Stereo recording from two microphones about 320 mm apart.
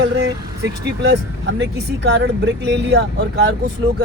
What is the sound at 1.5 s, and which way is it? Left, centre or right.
Speech, right.